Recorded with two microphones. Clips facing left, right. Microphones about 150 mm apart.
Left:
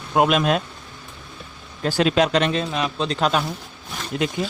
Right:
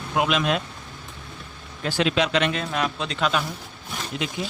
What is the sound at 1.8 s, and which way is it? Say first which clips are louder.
Speech: left 4 dB; 45° left (ahead or behind).